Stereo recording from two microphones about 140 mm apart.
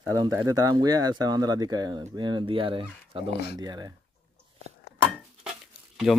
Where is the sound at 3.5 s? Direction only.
30° right (ahead or behind).